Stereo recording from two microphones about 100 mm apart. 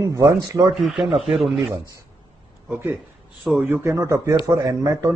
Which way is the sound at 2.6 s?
20° right (ahead or behind).